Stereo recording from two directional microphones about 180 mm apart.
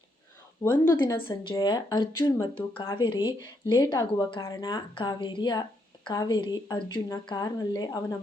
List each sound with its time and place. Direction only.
0.6 s speech: 15° left (ahead or behind)